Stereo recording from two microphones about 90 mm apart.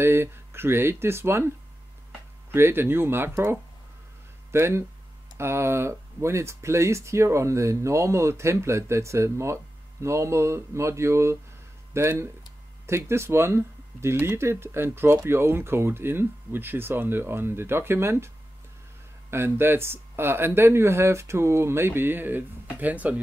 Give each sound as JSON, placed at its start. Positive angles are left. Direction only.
{"t": 0.0, "sound": "speech", "side_deg": -25}
{"t": 2.5, "sound": "speech", "side_deg": -25}
{"t": 19.3, "sound": "speech", "side_deg": -25}